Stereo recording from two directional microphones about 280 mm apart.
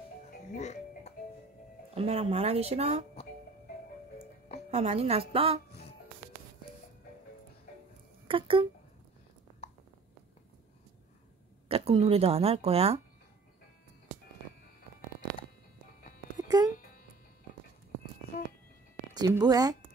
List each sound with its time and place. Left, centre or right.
0.6 s music: left
2.0 s speech: right
4.6 s speech: right
8.3 s speech: centre
11.7 s speech: right
16.3 s music: centre
16.7 s music: left
19.1 s a woman's voice: centre